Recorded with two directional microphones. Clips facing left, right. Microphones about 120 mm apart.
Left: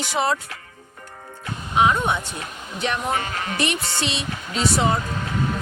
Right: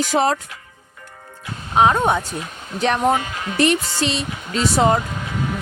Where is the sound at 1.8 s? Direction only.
45° right (ahead or behind).